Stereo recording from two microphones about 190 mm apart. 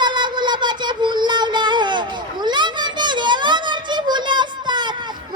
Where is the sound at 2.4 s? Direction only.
25° right (ahead or behind).